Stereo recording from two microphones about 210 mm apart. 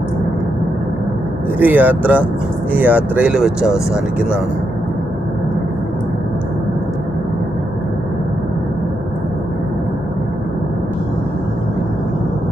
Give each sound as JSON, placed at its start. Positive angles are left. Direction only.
{"t": 1.5, "sound": "speech", "side_deg": -10}